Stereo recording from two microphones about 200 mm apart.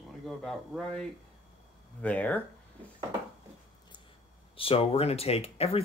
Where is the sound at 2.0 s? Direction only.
5° left (ahead or behind).